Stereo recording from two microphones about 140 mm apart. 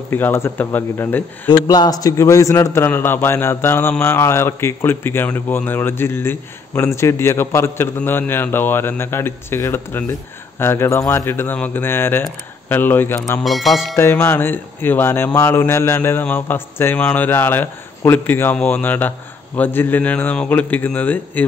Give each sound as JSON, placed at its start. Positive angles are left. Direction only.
{"t": 0.1, "sound": "speech", "side_deg": 15}
{"t": 1.5, "sound": "a man's voice", "side_deg": 30}
{"t": 13.4, "sound": "speech", "side_deg": 0}
{"t": 13.9, "sound": "speech", "side_deg": 15}